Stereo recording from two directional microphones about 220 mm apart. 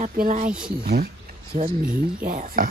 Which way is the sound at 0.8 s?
45° right (ahead or behind).